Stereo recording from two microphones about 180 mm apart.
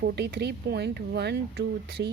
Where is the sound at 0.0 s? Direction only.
65° right (ahead or behind).